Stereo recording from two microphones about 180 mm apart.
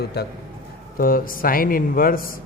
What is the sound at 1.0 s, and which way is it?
Speech, 50° left (ahead or behind).